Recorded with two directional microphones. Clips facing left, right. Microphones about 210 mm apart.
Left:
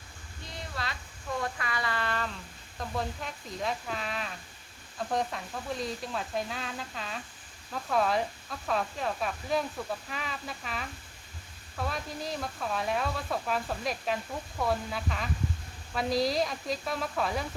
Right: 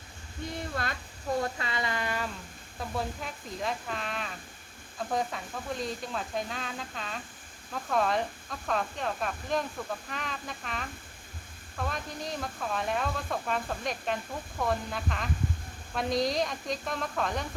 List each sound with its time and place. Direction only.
0.7 s speech: 50° right (ahead or behind)
1.4 s a sound: 25° right (ahead or behind)
2.7 s speech: 5° right (ahead or behind)